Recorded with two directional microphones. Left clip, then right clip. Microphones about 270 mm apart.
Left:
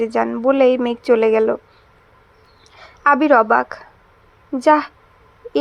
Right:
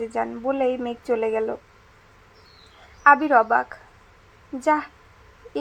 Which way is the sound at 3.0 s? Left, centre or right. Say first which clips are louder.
Left 3 dB; left.